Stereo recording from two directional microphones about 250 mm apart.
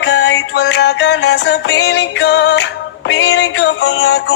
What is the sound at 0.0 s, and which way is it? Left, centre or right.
Music, left.